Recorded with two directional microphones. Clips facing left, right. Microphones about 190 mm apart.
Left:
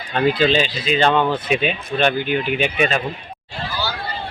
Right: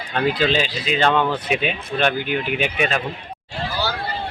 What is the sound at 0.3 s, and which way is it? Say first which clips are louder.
Speech: left 3 dB; 5° right (ahead or behind).